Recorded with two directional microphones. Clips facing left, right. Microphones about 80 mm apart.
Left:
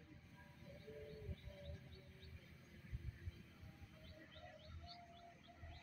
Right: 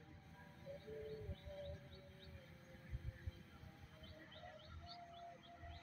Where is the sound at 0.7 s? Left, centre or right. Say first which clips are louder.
Right 5 dB; right.